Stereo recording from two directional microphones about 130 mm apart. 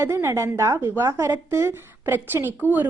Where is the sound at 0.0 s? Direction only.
20° right (ahead or behind).